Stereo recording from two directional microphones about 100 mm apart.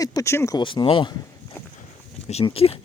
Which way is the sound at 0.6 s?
55° left (ahead or behind).